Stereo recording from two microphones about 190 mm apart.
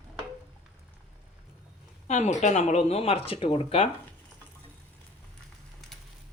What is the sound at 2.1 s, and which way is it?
Speech, 35° left (ahead or behind).